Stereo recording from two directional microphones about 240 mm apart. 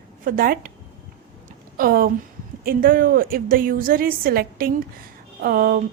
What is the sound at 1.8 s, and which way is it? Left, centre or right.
A woman's voice, right.